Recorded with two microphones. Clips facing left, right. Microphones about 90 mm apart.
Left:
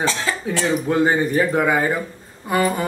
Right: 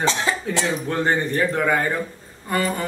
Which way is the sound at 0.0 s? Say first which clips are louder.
Right 1 dB; 20° right (ahead or behind).